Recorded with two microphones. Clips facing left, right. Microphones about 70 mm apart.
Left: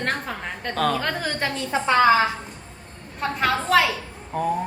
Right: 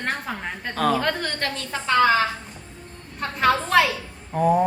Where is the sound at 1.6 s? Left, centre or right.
Centre.